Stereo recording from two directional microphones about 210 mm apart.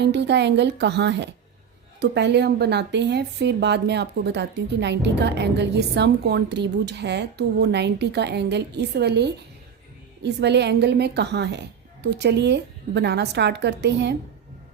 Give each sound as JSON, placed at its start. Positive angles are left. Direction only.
{"t": 0.0, "sound": "a woman's voice", "side_deg": -55}